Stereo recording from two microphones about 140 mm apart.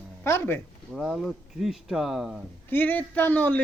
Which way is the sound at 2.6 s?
15° left (ahead or behind).